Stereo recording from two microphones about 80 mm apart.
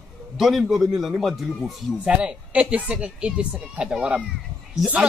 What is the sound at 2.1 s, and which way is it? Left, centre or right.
A man's voice, centre.